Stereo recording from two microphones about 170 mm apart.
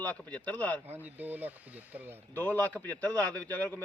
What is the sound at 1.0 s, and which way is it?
Speech, 10° right (ahead or behind).